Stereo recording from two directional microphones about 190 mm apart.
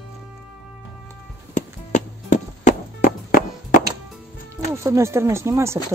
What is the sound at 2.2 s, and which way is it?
Music, 40° left (ahead or behind).